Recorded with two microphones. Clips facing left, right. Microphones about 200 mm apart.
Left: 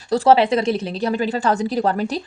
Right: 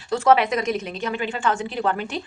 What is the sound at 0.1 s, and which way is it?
A woman's voice, 30° left (ahead or behind).